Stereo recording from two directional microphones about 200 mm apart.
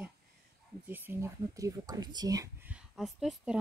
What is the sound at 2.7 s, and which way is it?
Speech, centre (ahead or behind).